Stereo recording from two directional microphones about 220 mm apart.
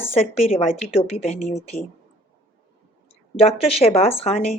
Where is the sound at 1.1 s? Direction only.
30° left (ahead or behind).